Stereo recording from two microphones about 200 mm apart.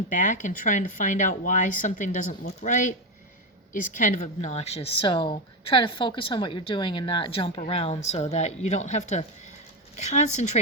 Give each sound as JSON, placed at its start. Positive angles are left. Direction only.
{"t": 0.1, "sound": "a woman's voice", "side_deg": 40}